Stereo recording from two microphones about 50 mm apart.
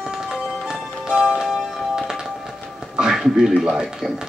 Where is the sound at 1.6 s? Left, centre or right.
Centre.